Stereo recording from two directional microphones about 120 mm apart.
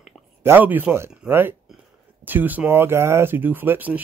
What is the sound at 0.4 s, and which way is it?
Speech, 20° right (ahead or behind).